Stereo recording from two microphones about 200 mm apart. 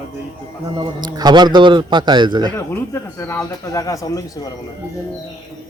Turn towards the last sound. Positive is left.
turn(degrees=15)  # may be behind; listen again after turning